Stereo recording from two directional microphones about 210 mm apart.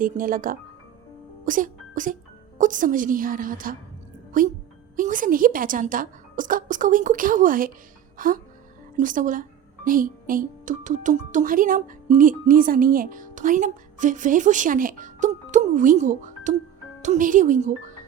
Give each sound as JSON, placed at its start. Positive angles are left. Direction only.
{"t": 0.0, "sound": "speech", "side_deg": -40}